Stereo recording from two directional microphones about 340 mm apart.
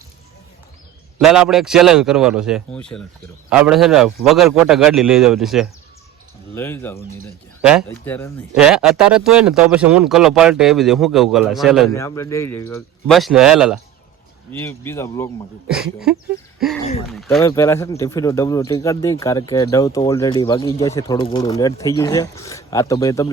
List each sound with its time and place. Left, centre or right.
1.2 s speech: centre
15.6 s speech: centre